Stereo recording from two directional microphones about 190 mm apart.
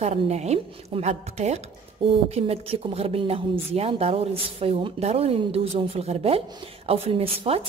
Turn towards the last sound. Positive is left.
turn(degrees=-30)  # may be behind; listen again after turning